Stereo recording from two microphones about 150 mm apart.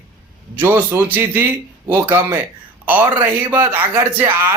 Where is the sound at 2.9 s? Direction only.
10° right (ahead or behind).